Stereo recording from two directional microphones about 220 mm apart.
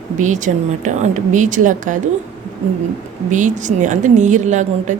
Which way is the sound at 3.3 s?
35° right (ahead or behind).